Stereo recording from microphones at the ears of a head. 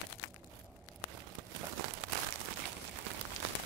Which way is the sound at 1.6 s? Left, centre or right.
Right.